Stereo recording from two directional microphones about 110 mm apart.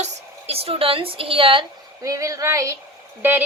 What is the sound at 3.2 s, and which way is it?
Speech, 15° right (ahead or behind).